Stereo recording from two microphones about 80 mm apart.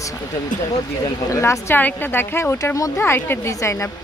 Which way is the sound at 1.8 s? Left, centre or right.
Left.